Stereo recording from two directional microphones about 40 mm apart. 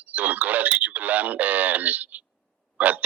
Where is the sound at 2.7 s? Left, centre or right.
Right.